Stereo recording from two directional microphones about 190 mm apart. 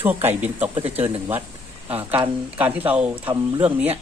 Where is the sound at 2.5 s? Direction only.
10° right (ahead or behind).